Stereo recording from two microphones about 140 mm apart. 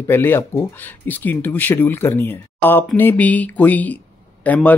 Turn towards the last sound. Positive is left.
turn(degrees=10)  # may be behind; listen again after turning